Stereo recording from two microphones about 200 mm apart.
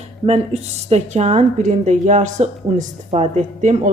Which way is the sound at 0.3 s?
30° right (ahead or behind).